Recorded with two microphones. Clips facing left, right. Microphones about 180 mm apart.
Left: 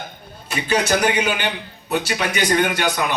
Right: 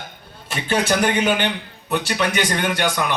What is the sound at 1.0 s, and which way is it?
Speech, 45° right (ahead or behind).